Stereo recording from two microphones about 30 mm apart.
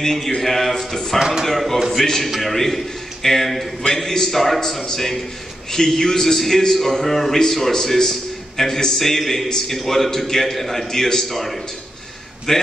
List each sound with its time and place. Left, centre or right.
0.0 s a man's voice: centre
3.8 s a man's voice: centre
12.5 s a man's voice: centre